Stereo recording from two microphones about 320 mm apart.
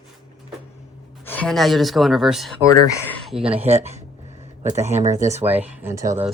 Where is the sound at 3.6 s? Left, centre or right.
Centre.